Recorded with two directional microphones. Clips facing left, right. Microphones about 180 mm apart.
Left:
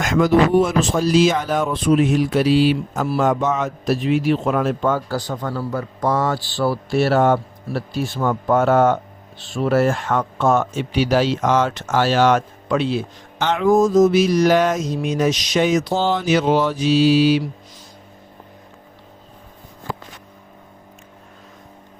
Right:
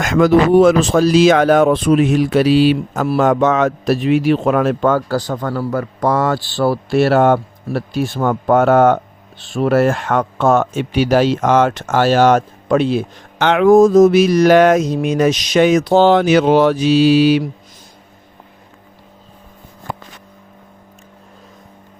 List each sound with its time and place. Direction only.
0.0 s speech: 70° right (ahead or behind)